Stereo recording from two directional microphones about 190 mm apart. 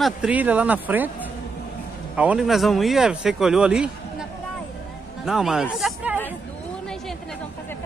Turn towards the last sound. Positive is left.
turn(degrees=-5)  # may be behind; listen again after turning